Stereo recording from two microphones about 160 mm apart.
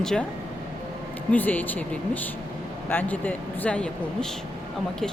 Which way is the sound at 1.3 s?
10° left (ahead or behind).